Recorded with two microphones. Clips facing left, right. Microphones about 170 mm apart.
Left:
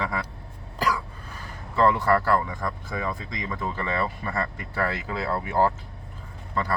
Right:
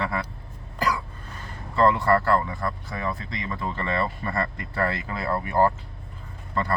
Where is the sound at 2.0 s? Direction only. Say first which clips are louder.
Right 1 dB; 5° left (ahead or behind).